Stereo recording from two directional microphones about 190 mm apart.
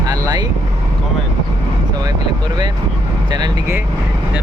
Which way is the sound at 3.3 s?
20° right (ahead or behind).